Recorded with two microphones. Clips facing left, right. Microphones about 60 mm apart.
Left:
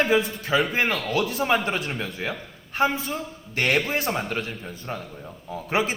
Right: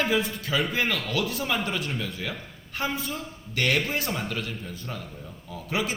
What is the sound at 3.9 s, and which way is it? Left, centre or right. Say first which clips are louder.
A man's voice: left 4 dB; left.